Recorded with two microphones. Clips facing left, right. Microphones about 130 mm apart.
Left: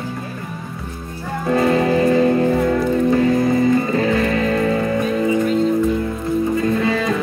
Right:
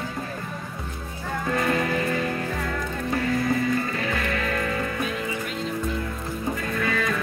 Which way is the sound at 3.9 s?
35° left (ahead or behind).